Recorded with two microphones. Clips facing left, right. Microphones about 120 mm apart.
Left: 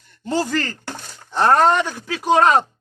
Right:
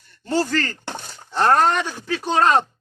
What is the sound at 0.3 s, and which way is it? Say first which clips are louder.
Speech: even; 15° left (ahead or behind).